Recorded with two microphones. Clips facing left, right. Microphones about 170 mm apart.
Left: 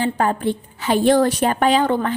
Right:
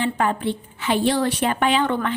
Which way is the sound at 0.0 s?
40° left (ahead or behind).